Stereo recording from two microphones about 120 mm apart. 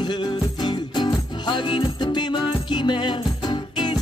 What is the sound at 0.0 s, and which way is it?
Music, 40° left (ahead or behind).